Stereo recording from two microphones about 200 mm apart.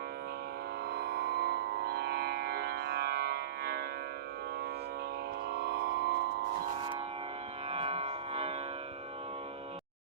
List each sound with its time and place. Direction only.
0.9 s music: 55° right (ahead or behind)
5.5 s music: 55° right (ahead or behind)
7.7 s music: 30° right (ahead or behind)